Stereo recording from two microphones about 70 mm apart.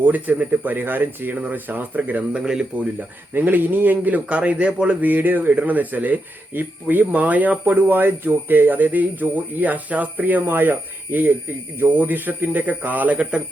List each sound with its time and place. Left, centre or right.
0.0 s speech: right
2.4 s speech: centre
3.3 s speech: right